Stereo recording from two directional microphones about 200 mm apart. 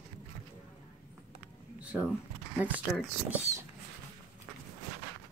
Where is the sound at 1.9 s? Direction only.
Centre (ahead or behind).